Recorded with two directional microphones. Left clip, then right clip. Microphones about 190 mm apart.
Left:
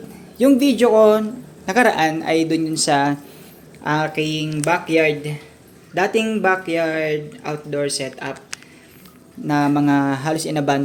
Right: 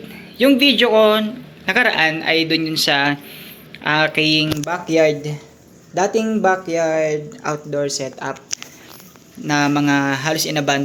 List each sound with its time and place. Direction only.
0.3 s speech: 15° left (ahead or behind); by 8.4 s 5° right (ahead or behind)
9.5 s speech: 10° left (ahead or behind)